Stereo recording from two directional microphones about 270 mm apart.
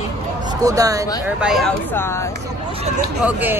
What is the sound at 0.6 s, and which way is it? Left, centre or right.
Speech, centre.